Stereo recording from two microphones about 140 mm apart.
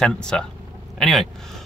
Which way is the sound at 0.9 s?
Centre (ahead or behind).